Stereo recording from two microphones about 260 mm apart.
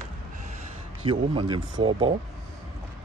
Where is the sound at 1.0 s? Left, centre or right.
Centre.